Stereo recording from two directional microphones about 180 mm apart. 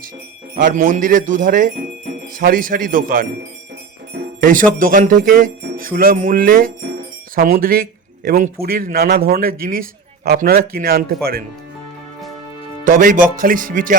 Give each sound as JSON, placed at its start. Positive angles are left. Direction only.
{"t": 0.5, "sound": "speech", "side_deg": -50}
{"t": 12.8, "sound": "speech", "side_deg": -50}